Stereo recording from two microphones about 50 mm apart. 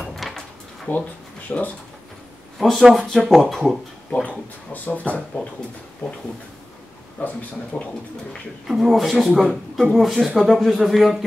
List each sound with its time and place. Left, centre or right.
0.0 s drawer open or close: centre
0.9 s speech: left
2.6 s speech: centre
4.1 s speech: left
7.2 s speech: left
7.7 s speech: centre
8.6 s speech: centre